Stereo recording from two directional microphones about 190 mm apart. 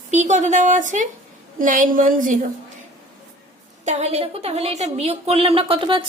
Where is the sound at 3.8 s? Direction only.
35° right (ahead or behind).